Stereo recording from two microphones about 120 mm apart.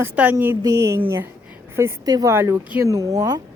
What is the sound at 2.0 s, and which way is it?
Speech, 30° right (ahead or behind).